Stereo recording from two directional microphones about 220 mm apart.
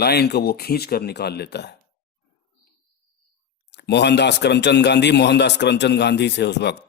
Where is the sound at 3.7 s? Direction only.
50° left (ahead or behind).